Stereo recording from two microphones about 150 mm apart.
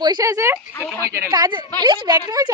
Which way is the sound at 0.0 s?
25° right (ahead or behind).